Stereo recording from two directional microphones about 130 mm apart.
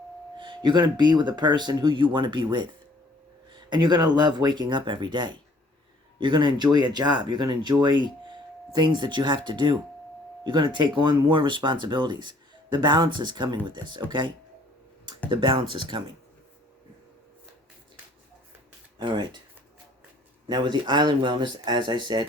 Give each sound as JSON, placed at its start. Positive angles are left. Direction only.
{"t": 0.3, "sound": "speech", "side_deg": -35}
{"t": 19.0, "sound": "speech", "side_deg": -35}
{"t": 20.5, "sound": "speech", "side_deg": -35}